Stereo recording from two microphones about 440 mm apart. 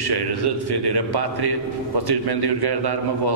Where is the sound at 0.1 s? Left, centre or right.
Right.